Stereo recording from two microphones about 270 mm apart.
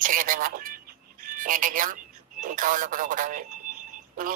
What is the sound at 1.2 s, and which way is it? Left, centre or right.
Speech, right.